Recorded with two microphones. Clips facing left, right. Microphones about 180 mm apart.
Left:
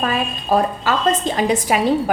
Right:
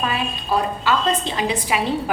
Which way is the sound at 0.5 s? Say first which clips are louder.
Left 3 dB; 45° left (ahead or behind).